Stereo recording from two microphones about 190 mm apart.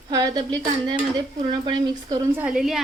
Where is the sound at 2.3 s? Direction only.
5° right (ahead or behind).